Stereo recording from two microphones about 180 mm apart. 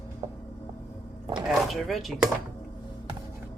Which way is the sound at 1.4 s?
Centre (ahead or behind).